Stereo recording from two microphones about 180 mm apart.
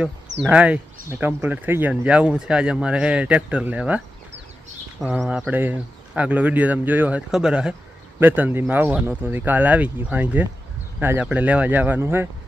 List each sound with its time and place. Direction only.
0.4 s speech: 5° right (ahead or behind)
5.0 s speech: 5° right (ahead or behind)